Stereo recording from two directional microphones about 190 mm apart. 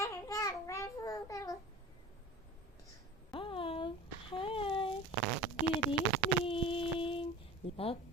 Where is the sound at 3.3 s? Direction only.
25° left (ahead or behind).